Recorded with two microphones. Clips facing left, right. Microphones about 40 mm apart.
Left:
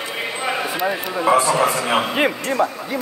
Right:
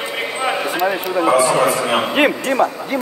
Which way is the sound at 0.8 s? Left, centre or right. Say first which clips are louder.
Right 3 dB; centre.